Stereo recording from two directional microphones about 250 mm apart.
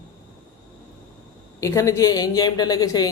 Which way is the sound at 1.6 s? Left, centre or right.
Centre.